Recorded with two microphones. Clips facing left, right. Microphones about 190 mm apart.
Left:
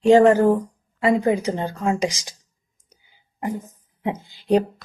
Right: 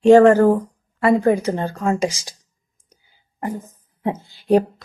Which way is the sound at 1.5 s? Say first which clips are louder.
Right 2 dB; 15° left (ahead or behind).